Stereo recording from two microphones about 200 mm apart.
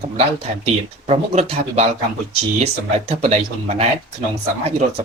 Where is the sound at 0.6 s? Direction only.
30° right (ahead or behind).